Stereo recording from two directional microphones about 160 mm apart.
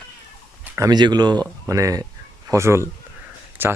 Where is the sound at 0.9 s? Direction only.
25° right (ahead or behind).